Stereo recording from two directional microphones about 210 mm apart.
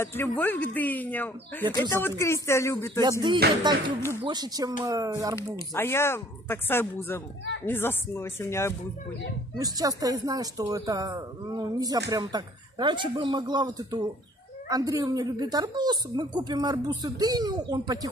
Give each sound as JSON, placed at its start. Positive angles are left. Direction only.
{"t": 0.0, "sound": "speech", "side_deg": 10}
{"t": 3.0, "sound": "speech", "side_deg": -20}
{"t": 5.3, "sound": "speech", "side_deg": 10}
{"t": 9.6, "sound": "speech", "side_deg": -15}